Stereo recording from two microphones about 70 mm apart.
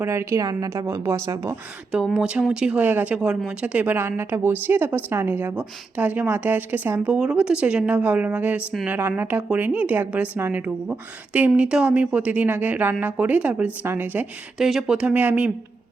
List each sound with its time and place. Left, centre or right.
0.0 s a woman's voice: right
0.3 s a woman's voice: right
2.0 s speech: centre
3.2 s speech: centre
7.2 s speech: centre
14.6 s speech: centre